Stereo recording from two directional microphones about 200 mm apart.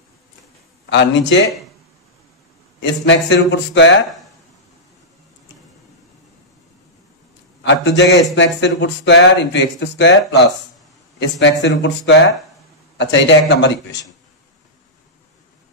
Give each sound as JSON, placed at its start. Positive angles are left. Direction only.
{"t": 0.8, "sound": "a man's voice", "side_deg": 65}
{"t": 2.8, "sound": "a man's voice", "side_deg": 60}
{"t": 7.6, "sound": "a man's voice", "side_deg": 60}